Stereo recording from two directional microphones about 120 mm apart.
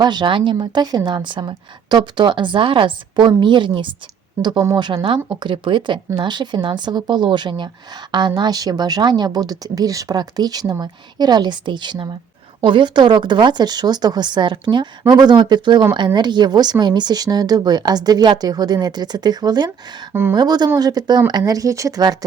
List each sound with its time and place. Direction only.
0.0 s speech: 35° right (ahead or behind)